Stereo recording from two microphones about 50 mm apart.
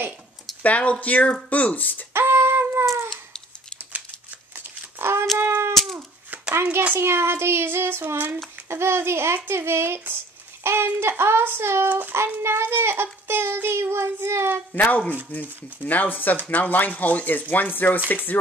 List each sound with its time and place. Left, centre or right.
0.6 s speech: left
2.1 s music: right
4.6 s a sound: right
6.5 s a child's voice: right
7.0 s child singing: right
8.6 s speech: right
14.7 s speech: left